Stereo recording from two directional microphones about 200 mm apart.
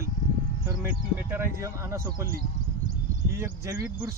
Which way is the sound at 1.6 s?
15° right (ahead or behind).